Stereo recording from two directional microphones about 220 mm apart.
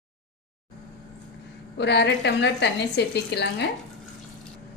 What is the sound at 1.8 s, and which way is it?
A woman's voice, 50° left (ahead or behind).